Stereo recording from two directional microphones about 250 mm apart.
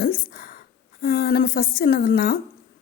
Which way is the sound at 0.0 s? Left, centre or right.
Left.